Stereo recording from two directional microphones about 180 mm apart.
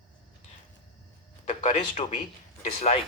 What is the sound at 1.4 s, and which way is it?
A man's voice, 40° left (ahead or behind).